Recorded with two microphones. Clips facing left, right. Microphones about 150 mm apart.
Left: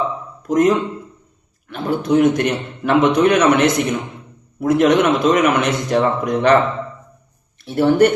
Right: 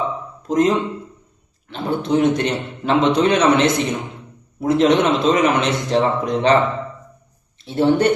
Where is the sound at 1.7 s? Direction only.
25° right (ahead or behind).